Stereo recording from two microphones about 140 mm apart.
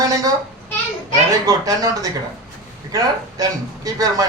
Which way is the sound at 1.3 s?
25° right (ahead or behind).